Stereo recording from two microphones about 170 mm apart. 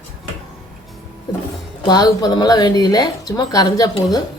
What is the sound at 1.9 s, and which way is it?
Speech, 25° left (ahead or behind).